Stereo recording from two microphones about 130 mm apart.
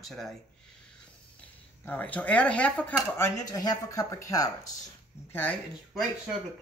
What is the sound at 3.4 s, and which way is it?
Speech, 30° left (ahead or behind).